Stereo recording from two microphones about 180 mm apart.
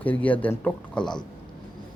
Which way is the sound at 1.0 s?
25° left (ahead or behind).